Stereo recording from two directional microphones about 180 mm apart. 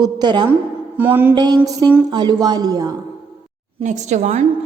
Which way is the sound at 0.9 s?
10° right (ahead or behind).